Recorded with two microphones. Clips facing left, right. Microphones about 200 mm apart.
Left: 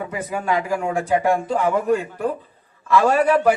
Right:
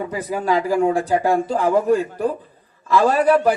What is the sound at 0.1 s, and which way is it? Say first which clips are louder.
A man's voice: right 2 dB; 35° right (ahead or behind).